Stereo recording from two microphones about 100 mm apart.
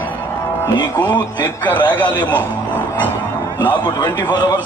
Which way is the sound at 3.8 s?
45° left (ahead or behind).